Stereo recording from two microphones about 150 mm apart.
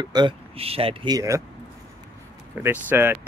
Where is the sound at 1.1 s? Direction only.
20° right (ahead or behind).